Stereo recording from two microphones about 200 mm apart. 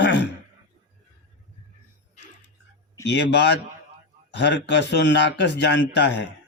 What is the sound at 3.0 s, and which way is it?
A man's voice, 60° left (ahead or behind).